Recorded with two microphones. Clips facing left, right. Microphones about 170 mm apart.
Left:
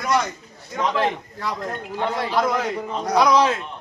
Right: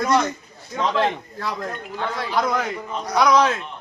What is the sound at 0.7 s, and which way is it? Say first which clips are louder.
A man's voice: right 1 dB; 10° left (ahead or behind).